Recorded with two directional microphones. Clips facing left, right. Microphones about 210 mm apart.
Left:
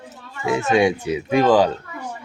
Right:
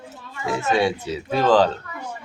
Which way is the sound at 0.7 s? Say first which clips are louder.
Left 4 dB; 15° left (ahead or behind).